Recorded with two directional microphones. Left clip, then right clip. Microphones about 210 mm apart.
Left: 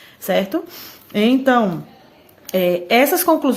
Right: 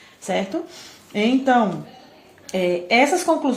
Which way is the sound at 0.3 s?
50° left (ahead or behind).